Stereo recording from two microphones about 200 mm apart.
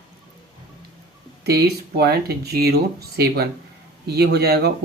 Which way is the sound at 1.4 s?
50° right (ahead or behind).